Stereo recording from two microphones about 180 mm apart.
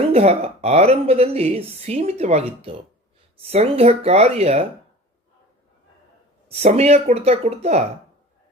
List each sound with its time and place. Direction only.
0.1 s speech: 35° right (ahead or behind)
6.5 s speech: 35° right (ahead or behind)